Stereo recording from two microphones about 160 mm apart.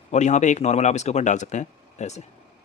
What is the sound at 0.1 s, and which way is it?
Speech, 45° left (ahead or behind).